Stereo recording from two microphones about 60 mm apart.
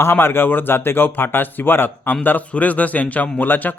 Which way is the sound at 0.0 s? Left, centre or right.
Left.